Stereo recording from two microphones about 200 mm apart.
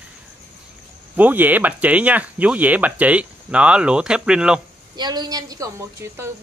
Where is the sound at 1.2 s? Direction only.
10° right (ahead or behind).